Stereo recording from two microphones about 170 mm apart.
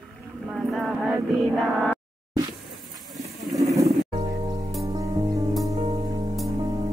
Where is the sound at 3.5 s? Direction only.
20° right (ahead or behind).